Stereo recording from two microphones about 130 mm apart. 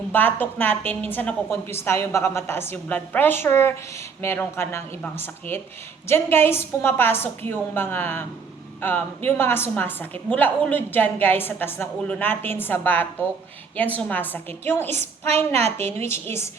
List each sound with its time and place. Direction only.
0.1 s a woman's voice: 15° left (ahead or behind)